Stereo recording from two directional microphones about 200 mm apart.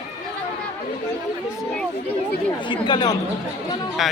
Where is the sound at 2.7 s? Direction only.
20° left (ahead or behind).